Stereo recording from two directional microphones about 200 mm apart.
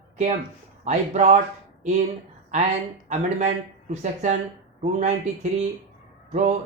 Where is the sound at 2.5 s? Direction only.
35° right (ahead or behind).